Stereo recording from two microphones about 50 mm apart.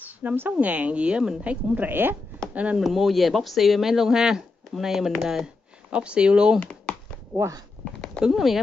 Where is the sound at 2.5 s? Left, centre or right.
Right.